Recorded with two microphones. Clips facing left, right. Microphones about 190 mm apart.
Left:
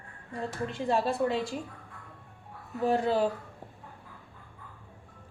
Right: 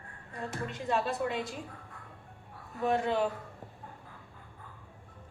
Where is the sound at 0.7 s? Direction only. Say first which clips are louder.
Left 4 dB; 30° left (ahead or behind).